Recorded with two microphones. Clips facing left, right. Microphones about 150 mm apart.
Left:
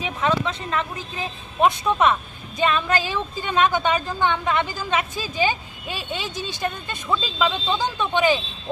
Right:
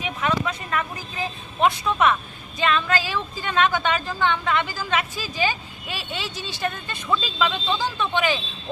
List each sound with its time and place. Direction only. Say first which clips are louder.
0.0 s a woman's voice: left 2 dB; 30° left (ahead or behind)